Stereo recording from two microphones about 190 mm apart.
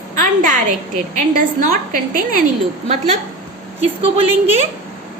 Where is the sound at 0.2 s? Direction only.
45° right (ahead or behind).